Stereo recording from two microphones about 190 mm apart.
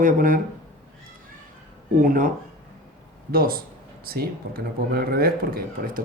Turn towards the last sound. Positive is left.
turn(degrees=-50)  # may be behind; listen again after turning